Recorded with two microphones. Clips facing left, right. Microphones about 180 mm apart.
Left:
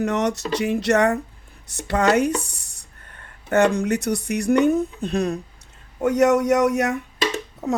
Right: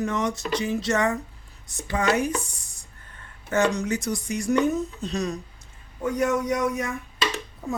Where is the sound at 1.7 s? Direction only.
70° left (ahead or behind).